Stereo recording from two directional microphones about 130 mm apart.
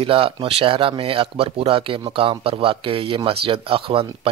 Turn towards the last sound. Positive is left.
turn(degrees=-45)  # may be behind; listen again after turning